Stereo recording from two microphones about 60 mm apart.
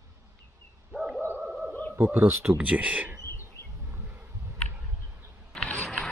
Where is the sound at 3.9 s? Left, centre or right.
Right.